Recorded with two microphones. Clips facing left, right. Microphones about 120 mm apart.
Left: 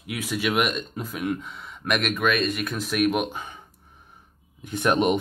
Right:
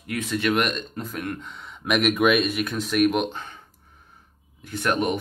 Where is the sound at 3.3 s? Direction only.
10° left (ahead or behind).